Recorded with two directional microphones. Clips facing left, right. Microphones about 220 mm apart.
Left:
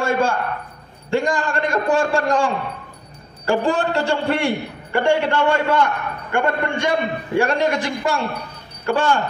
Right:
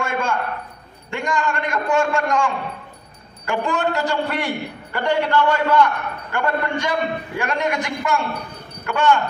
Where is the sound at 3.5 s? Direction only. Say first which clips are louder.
Left 3 dB; 30° left (ahead or behind).